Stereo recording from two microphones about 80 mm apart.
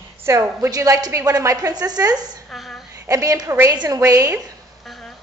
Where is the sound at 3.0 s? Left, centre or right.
Right.